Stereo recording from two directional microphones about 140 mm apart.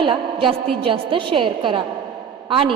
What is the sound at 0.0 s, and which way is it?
A woman's voice, 35° right (ahead or behind).